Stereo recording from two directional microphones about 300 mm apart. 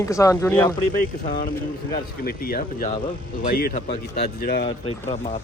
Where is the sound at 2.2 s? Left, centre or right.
Left.